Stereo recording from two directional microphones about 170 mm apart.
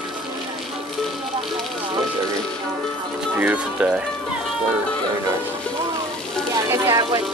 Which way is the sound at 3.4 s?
10° right (ahead or behind).